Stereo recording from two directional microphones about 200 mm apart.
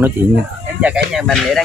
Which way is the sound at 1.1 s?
Centre (ahead or behind).